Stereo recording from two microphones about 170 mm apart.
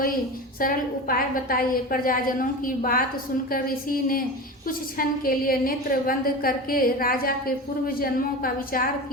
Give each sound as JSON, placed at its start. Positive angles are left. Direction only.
{"t": 0.6, "sound": "a woman's voice", "side_deg": 55}